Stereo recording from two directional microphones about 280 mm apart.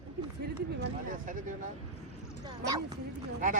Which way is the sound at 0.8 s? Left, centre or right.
Right.